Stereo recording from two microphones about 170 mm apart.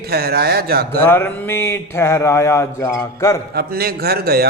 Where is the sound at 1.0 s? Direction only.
15° left (ahead or behind).